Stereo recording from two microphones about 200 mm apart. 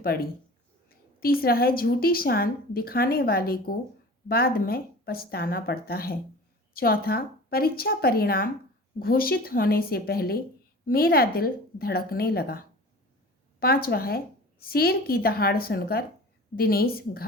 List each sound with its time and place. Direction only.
0.0 s a woman's voice: 50° left (ahead or behind)